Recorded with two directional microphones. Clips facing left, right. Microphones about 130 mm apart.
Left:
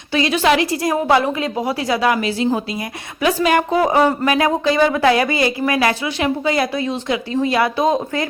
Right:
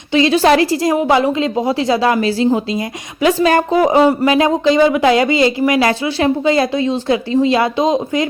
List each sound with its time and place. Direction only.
0.1 s a woman's voice: 30° right (ahead or behind)
0.9 s a woman's voice: 20° right (ahead or behind)
3.8 s speech: 20° right (ahead or behind)